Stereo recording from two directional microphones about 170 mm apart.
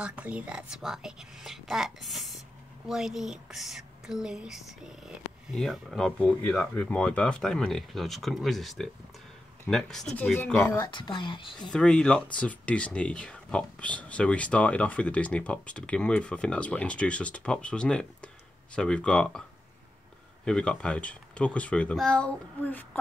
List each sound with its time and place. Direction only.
0.0 s a woman's voice: 10° right (ahead or behind); by 10.8 s 10° left (ahead or behind)
10.8 s speech: 30° left (ahead or behind)
11.7 s a woman's voice: 5° left (ahead or behind)
20.4 s speech: 5° left (ahead or behind)